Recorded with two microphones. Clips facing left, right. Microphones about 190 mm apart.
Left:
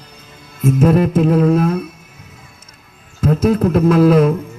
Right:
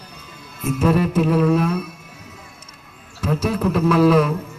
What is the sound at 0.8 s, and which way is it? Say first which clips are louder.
Speech: left 4 dB; 50° left (ahead or behind).